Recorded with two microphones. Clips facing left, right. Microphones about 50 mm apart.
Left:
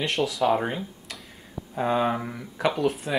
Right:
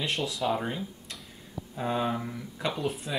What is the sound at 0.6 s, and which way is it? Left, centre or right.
Speech, left.